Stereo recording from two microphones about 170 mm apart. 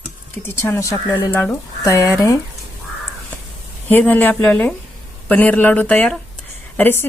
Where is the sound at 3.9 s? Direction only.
10° left (ahead or behind).